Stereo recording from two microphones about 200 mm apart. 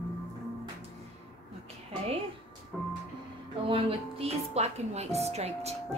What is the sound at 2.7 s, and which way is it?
Music, 5° right (ahead or behind).